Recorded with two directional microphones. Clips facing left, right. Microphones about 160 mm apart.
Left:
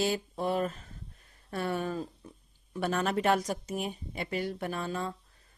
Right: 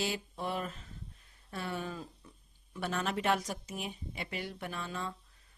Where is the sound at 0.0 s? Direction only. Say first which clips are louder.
Left 6 dB; 40° left (ahead or behind).